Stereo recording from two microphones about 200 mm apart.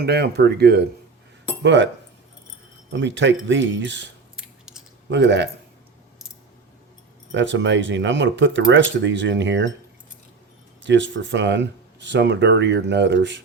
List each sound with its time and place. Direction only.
0.0 s speech: 55° right (ahead or behind)
2.9 s speech: 65° right (ahead or behind)
4.4 s a sound: 5° right (ahead or behind)
5.0 s speech: 60° right (ahead or behind)
7.3 s speech: 65° right (ahead or behind)
10.8 s speech: 65° right (ahead or behind)